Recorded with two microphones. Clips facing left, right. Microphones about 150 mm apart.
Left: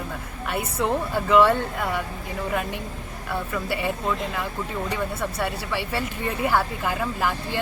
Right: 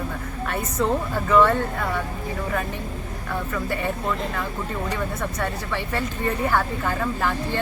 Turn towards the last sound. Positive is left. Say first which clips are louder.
# right 2 dB
turn(degrees=10)  # may be behind; listen again after turning